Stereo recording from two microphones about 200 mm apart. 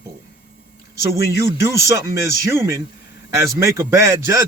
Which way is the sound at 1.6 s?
15° right (ahead or behind).